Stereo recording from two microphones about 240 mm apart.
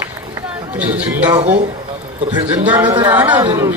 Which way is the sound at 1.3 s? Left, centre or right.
Right.